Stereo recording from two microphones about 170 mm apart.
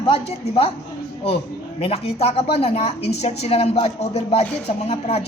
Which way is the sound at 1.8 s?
35° left (ahead or behind).